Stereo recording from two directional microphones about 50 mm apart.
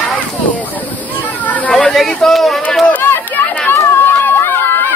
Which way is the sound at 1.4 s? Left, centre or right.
Left.